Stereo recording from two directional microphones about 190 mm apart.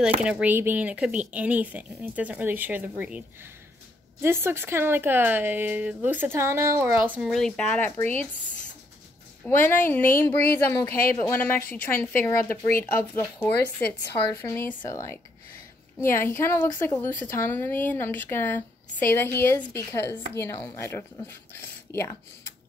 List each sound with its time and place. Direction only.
0.2 s a woman's voice: 5° right (ahead or behind); by 8.2 s 10° left (ahead or behind)
9.4 s a woman's voice: 10° left (ahead or behind)